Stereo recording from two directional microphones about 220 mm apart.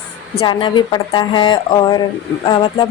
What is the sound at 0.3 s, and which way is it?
A woman's voice, 20° left (ahead or behind).